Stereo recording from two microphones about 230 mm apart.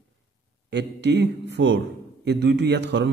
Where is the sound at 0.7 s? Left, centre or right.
Right.